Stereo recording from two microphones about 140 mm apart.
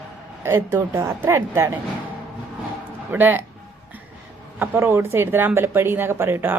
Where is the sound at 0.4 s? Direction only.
20° right (ahead or behind).